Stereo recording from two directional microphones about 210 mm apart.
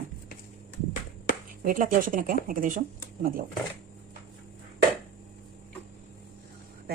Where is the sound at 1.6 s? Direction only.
40° right (ahead or behind).